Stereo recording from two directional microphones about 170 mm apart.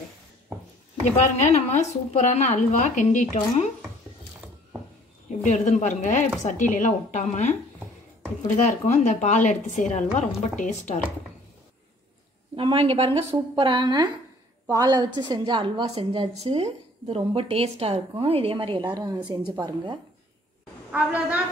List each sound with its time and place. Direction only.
1.0 s a woman's voice: 45° left (ahead or behind)
5.4 s a woman's voice: 40° left (ahead or behind)
8.6 s a woman's voice: 40° left (ahead or behind)
12.5 s a woman's voice: 30° right (ahead or behind)
20.9 s a woman's voice: 10° right (ahead or behind)